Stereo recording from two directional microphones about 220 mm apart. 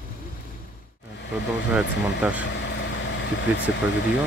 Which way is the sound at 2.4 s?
55° left (ahead or behind).